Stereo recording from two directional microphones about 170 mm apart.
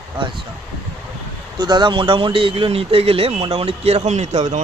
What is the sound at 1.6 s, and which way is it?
Speech, 25° right (ahead or behind).